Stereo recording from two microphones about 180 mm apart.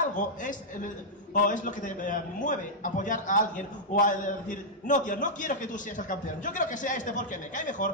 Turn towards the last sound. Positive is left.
turn(degrees=45)  # may be behind; listen again after turning